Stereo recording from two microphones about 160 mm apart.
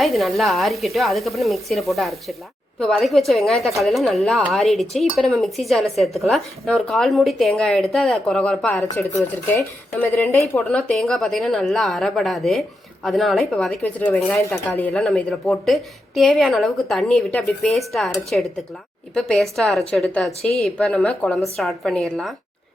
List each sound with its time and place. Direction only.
0.0 s speech: centre (ahead or behind); by 10.4 s 15° left (ahead or behind)
10.6 s speech: 5° left (ahead or behind)